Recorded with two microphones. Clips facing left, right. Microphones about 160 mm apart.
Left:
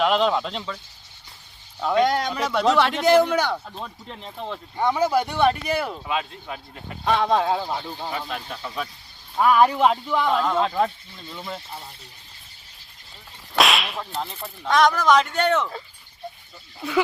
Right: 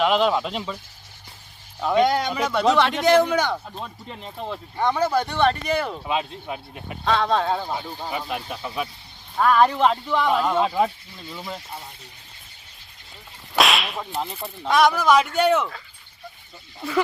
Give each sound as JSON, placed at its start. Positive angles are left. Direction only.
{"t": 0.0, "sound": "speech", "side_deg": -5}
{"t": 1.8, "sound": "speech", "side_deg": 0}
{"t": 4.8, "sound": "speech", "side_deg": 10}
{"t": 6.1, "sound": "speech", "side_deg": -20}
{"t": 7.0, "sound": "speech", "side_deg": 15}
{"t": 7.7, "sound": "whip", "side_deg": -10}
{"t": 9.4, "sound": "speech", "side_deg": 10}
{"t": 10.2, "sound": "speech", "side_deg": -5}
{"t": 13.5, "sound": "whip", "side_deg": 0}